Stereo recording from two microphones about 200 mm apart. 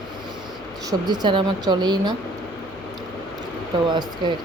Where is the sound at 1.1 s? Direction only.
20° right (ahead or behind).